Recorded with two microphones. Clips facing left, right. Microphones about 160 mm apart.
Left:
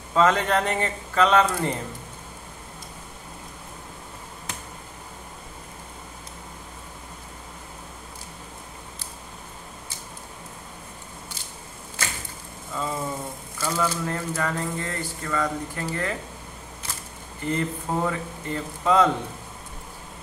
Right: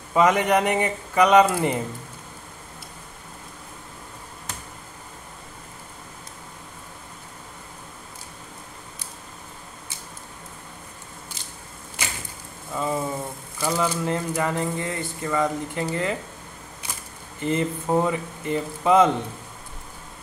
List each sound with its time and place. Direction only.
0.1 s speech: 15° right (ahead or behind)
12.0 s a sound: 15° right (ahead or behind)
12.7 s speech: 15° right (ahead or behind)
17.4 s speech: 20° right (ahead or behind)